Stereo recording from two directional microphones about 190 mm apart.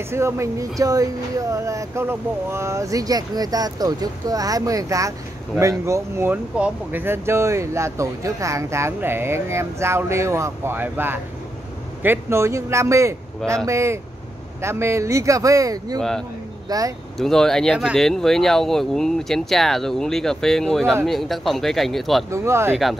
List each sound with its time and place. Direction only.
0.1 s speech: 15° right (ahead or behind)
16.0 s speech: 5° left (ahead or behind)
16.6 s speech: 20° right (ahead or behind)
17.2 s speech: centre (ahead or behind)
22.3 s speech: 15° right (ahead or behind)